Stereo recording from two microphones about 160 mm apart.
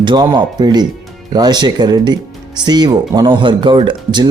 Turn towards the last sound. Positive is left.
turn(degrees=-30)  # may be behind; listen again after turning